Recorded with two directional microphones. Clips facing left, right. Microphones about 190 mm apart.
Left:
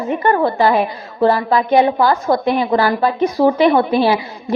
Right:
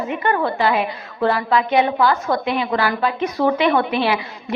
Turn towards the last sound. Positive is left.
turn(degrees=35)  # may be behind; listen again after turning